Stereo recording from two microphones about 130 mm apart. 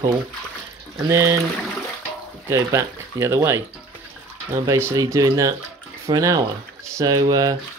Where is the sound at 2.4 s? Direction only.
20° right (ahead or behind).